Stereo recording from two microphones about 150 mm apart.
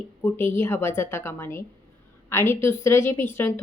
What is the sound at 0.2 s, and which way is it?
A woman's voice, 15° left (ahead or behind).